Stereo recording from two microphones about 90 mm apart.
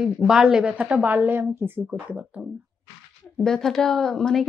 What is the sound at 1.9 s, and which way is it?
Speech, 15° right (ahead or behind).